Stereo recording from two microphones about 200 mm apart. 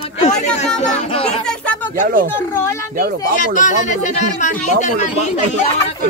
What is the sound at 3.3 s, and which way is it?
Speech, 40° left (ahead or behind).